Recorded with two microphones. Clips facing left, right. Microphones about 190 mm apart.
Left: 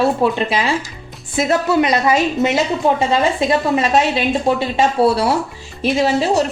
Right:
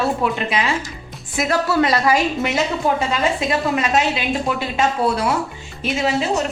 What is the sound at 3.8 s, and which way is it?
A woman's voice, 30° left (ahead or behind).